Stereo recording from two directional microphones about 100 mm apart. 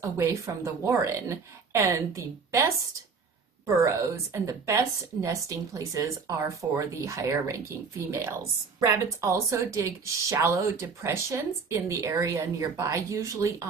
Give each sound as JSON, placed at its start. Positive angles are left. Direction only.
{"t": 0.0, "sound": "a woman's voice", "side_deg": -30}